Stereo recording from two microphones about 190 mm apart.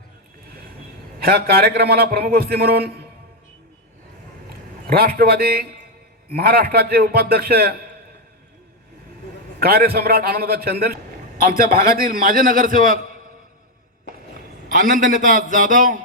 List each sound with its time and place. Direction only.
1.2 s a man's voice: 55° right (ahead or behind)
4.9 s a man's voice: 50° right (ahead or behind)
9.6 s a man's voice: 55° right (ahead or behind)
14.7 s a man's voice: 45° right (ahead or behind)